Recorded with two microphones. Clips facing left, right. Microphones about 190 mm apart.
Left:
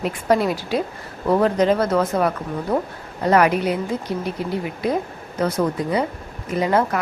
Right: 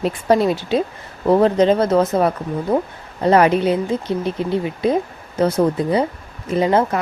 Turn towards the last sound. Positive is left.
turn(degrees=-25)  # may be behind; listen again after turning